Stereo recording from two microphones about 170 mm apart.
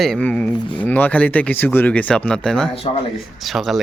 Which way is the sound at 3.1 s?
Centre (ahead or behind).